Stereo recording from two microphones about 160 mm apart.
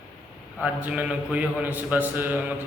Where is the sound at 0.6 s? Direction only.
10° right (ahead or behind).